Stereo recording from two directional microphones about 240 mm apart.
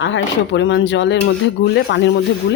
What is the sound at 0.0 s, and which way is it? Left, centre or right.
Speech, left.